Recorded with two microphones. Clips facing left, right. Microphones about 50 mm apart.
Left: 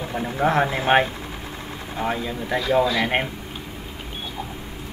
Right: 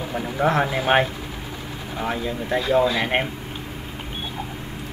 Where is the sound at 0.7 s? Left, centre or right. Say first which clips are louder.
Even; centre.